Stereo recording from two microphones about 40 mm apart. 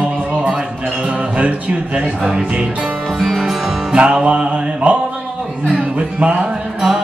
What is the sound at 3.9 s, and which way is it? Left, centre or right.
Music, right.